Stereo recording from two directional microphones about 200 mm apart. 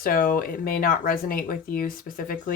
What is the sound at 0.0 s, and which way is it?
Speech, 45° left (ahead or behind).